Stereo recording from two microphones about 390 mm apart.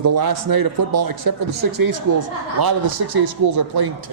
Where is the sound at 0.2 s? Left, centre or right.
Right.